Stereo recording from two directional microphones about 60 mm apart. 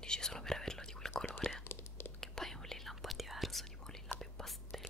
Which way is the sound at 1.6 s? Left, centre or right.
Left.